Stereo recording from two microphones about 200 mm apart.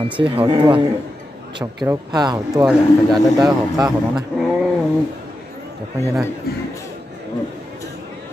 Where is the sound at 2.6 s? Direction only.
Centre (ahead or behind).